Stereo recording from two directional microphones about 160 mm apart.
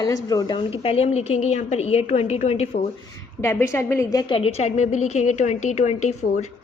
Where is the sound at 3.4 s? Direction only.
15° left (ahead or behind).